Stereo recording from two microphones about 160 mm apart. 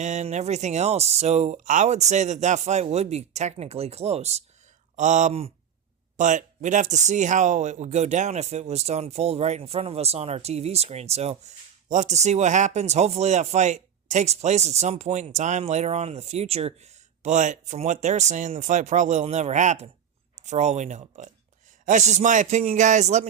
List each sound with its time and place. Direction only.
0.0 s speech: 45° right (ahead or behind)